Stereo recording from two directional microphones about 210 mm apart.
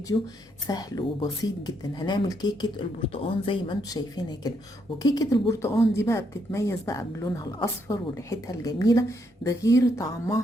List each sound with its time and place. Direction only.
0.1 s a woman's voice: 20° left (ahead or behind)